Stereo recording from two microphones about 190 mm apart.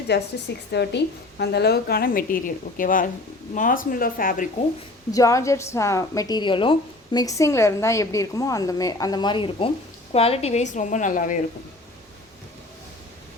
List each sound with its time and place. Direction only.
0.1 s a woman's voice: 65° left (ahead or behind); by 4.4 s 45° left (ahead or behind)
5.1 s a woman's voice: 15° left (ahead or behind); by 11.3 s 45° left (ahead or behind)